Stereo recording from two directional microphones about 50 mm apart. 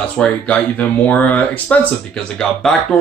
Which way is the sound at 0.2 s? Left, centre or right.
Centre.